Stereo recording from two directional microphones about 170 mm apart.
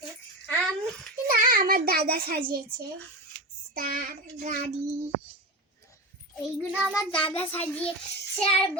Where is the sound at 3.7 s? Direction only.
55° right (ahead or behind).